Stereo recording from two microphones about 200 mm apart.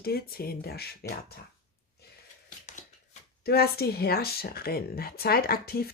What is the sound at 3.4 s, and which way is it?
Speech, 50° left (ahead or behind).